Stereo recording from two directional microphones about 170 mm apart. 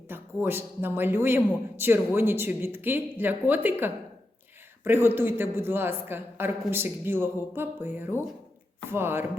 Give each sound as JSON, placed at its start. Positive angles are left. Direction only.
{"t": 0.1, "sound": "a man's voice", "side_deg": -10}